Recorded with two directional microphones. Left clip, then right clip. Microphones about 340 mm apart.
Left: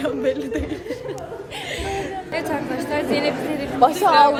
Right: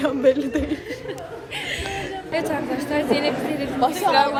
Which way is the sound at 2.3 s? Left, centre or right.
Centre.